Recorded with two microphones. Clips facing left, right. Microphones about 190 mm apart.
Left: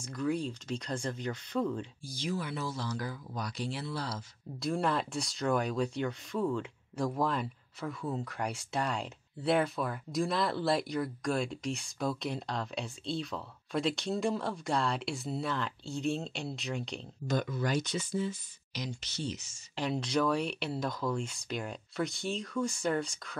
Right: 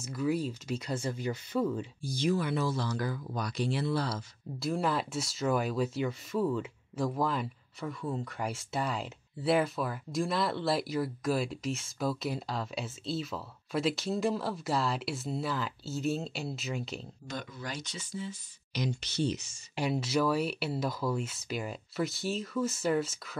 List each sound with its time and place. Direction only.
0.0 s speech: 5° right (ahead or behind)
2.1 s speech: 60° right (ahead or behind)
4.6 s speech: centre (ahead or behind)
17.3 s speech: 55° left (ahead or behind)
18.7 s speech: 65° right (ahead or behind)
19.7 s speech: 5° right (ahead or behind)